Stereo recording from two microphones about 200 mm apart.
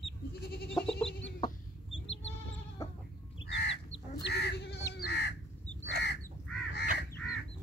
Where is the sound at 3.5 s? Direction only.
60° left (ahead or behind).